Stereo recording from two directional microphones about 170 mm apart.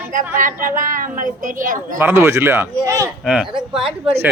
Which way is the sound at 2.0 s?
15° right (ahead or behind).